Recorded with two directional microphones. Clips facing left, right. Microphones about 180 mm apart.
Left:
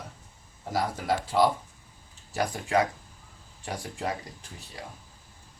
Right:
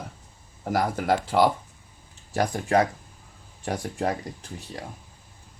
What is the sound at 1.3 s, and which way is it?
Speech, 60° right (ahead or behind).